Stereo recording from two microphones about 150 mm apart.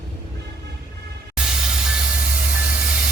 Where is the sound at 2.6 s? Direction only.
10° right (ahead or behind).